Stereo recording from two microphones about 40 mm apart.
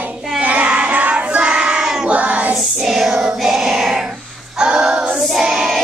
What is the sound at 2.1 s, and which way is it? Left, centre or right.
Child singing, right.